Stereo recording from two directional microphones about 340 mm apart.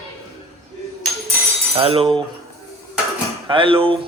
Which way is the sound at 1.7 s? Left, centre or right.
Centre.